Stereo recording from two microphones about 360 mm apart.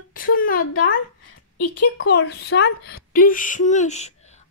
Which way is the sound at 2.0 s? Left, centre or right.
Left.